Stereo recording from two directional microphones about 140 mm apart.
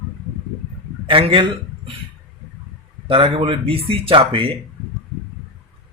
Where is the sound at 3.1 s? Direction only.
40° right (ahead or behind).